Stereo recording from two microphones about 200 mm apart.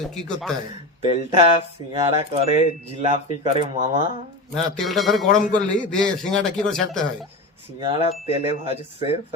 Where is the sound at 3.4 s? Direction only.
25° right (ahead or behind).